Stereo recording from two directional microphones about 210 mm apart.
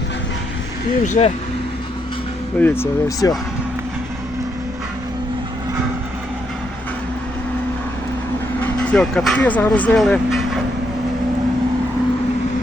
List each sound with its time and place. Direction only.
1.0 s speech: 35° left (ahead or behind)
2.6 s speech: 10° left (ahead or behind)
8.6 s speech: 5° left (ahead or behind)